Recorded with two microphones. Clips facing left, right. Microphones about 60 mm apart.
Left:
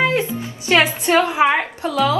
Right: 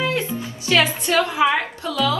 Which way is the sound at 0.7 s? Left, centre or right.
Left.